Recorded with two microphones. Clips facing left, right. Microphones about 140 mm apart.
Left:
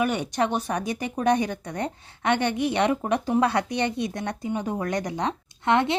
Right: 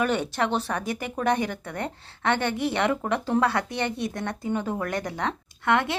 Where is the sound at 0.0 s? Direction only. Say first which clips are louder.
Left 1 dB; 15° left (ahead or behind).